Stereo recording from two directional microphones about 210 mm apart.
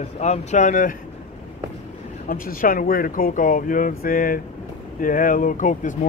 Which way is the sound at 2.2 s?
40° left (ahead or behind).